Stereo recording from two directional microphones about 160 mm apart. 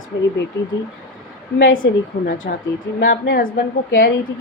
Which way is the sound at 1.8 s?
90° left.